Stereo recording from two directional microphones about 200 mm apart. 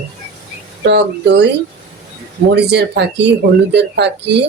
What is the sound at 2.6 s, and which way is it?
Speech, 55° right (ahead or behind).